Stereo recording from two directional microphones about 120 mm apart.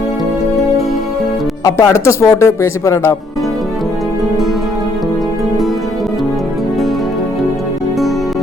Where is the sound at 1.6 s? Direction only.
25° left (ahead or behind).